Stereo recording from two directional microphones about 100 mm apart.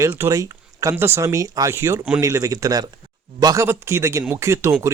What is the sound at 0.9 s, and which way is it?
Speech, 25° right (ahead or behind).